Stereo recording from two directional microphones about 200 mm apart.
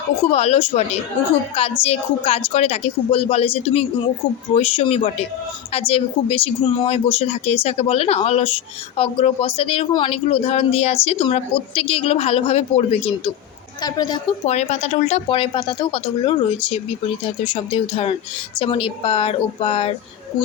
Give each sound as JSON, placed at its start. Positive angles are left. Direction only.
{"t": 0.2, "sound": "a woman's voice", "side_deg": 30}
{"t": 13.8, "sound": "a woman's voice", "side_deg": 20}
{"t": 14.4, "sound": "a woman's voice", "side_deg": 35}